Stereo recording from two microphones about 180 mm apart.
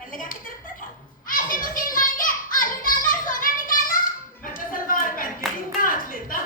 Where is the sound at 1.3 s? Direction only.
50° left (ahead or behind).